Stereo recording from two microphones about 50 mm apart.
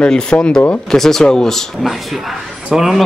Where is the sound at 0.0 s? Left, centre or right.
Centre.